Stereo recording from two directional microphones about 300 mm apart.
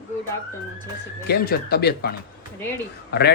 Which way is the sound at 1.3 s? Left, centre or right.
Left.